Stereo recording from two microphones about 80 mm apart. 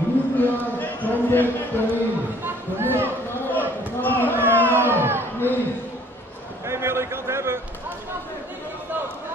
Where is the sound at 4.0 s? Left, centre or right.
Left.